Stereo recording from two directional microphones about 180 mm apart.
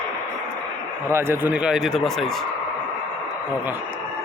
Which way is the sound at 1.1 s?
15° right (ahead or behind).